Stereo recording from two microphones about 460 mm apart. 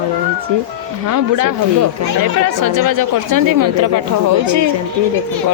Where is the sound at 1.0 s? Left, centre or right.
Right.